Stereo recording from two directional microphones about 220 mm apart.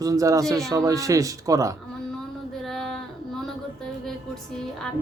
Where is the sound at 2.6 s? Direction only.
Centre (ahead or behind).